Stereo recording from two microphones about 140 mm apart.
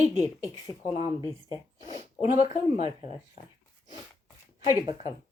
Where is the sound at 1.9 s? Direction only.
50° left (ahead or behind).